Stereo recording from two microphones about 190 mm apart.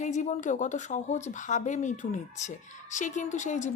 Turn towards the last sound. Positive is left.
turn(degrees=40)  # may be behind; listen again after turning